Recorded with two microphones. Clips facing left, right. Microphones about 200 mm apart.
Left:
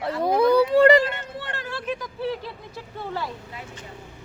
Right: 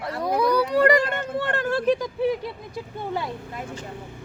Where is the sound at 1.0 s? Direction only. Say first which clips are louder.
Right 3 dB; 50° right (ahead or behind).